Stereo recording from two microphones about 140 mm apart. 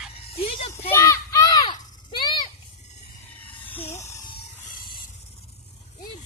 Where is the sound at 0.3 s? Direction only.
45° left (ahead or behind).